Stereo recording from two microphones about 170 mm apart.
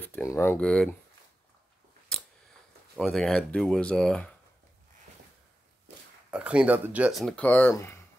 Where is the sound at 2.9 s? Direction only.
Centre (ahead or behind).